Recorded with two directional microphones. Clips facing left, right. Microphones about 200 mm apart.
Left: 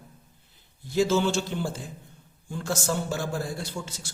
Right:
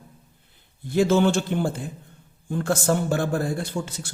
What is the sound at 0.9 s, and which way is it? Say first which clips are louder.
A man's voice: right 4 dB; 55° right (ahead or behind).